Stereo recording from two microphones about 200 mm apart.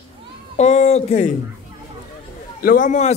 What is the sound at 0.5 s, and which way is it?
Speech, 35° left (ahead or behind).